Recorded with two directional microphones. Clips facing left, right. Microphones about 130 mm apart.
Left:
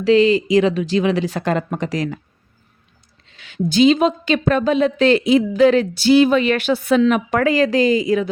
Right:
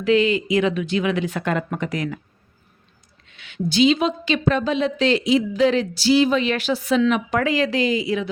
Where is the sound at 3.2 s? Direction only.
40° left (ahead or behind).